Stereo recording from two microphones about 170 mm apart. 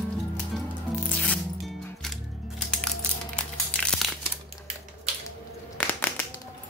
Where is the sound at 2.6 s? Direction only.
5° left (ahead or behind).